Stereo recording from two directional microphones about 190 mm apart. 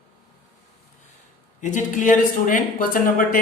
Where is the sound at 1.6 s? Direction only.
40° left (ahead or behind).